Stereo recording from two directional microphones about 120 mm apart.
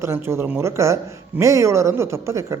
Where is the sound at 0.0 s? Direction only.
20° right (ahead or behind).